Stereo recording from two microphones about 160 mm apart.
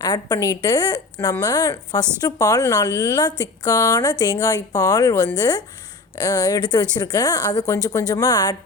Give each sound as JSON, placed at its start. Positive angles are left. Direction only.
{"t": 0.0, "sound": "speech", "side_deg": 25}